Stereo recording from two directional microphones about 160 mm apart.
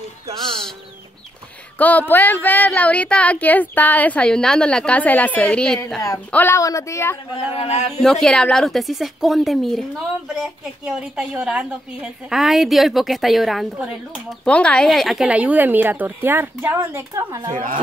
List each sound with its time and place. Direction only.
1.8 s speech: 10° left (ahead or behind)
6.0 s speech: 15° left (ahead or behind)
7.5 s speech: 40° left (ahead or behind)
8.0 s a woman's voice: 5° left (ahead or behind); by 17.5 s 20° right (ahead or behind)